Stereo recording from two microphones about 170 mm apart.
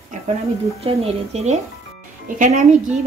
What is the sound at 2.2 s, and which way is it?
Cutlery, 50° right (ahead or behind).